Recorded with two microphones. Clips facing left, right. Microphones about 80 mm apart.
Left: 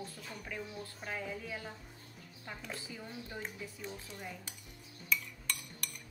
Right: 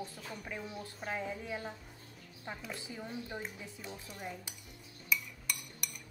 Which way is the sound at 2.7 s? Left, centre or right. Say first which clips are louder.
Right 3 dB; centre.